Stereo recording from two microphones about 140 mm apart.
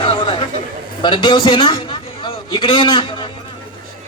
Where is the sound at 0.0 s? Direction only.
40° left (ahead or behind).